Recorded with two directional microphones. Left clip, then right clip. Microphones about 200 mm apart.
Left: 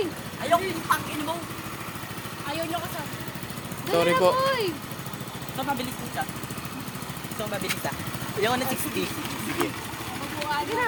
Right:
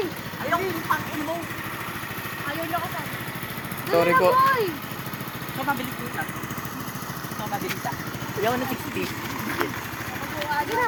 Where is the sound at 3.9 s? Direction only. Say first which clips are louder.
Right 2 dB; 5° left (ahead or behind).